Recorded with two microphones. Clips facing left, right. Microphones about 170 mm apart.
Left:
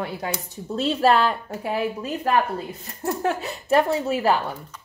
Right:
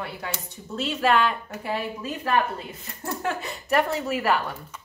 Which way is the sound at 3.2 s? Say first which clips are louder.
Left 3 dB; 30° left (ahead or behind).